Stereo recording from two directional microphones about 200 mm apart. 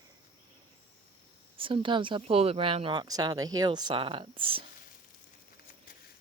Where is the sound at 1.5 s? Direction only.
25° right (ahead or behind).